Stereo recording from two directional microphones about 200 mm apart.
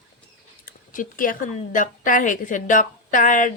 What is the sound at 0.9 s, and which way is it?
A woman's voice, 45° left (ahead or behind).